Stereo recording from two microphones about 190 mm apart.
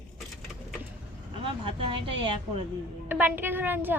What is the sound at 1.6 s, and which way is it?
Speech, 25° right (ahead or behind).